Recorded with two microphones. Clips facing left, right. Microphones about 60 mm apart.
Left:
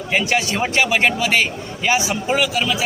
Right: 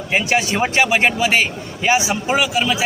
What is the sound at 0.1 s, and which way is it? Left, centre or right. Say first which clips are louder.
A man's voice: right 1 dB; centre.